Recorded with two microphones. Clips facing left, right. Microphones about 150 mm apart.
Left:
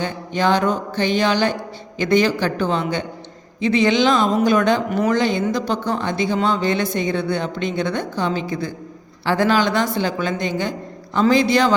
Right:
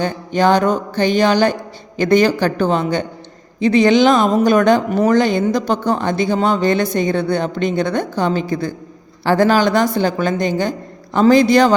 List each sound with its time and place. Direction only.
0.0 s a woman's voice: 45° right (ahead or behind)